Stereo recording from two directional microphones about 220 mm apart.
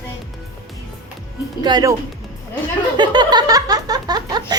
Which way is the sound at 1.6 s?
20° right (ahead or behind).